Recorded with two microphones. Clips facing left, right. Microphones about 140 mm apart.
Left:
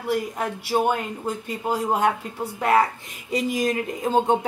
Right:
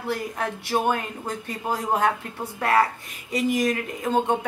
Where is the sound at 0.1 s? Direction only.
10° left (ahead or behind).